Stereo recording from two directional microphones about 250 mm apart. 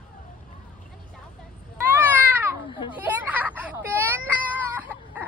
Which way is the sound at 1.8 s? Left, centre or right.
Centre.